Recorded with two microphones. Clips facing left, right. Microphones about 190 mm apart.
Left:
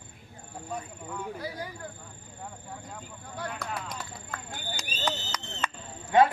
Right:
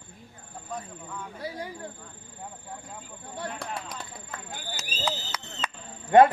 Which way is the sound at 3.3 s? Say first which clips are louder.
Right 1 dB; 25° right (ahead or behind).